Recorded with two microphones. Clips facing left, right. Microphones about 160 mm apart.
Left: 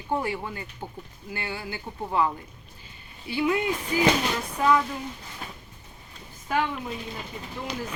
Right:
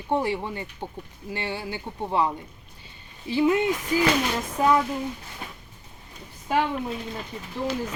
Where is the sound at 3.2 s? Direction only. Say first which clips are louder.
Right 4 dB; 30° right (ahead or behind).